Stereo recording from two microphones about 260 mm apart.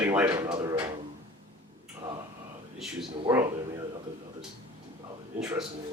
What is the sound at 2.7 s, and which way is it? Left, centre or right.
Speech, centre.